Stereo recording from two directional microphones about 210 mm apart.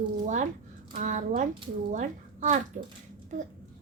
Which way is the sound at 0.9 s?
35° right (ahead or behind).